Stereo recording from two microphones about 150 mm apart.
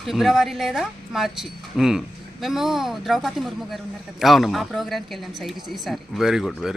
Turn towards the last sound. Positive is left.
turn(degrees=0)  # may be behind; listen again after turning